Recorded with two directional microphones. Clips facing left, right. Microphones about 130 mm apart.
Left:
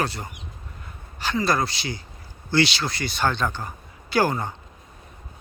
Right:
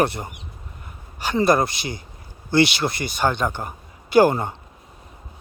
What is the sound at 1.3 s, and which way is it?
Speech, 20° right (ahead or behind).